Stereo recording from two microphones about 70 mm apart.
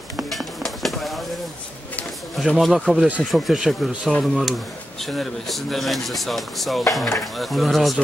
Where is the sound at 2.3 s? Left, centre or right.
Centre.